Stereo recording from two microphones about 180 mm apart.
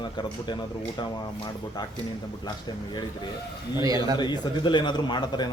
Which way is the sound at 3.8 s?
20° right (ahead or behind).